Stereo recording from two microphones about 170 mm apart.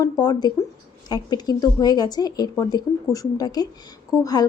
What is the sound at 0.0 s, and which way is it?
Speech, 25° left (ahead or behind).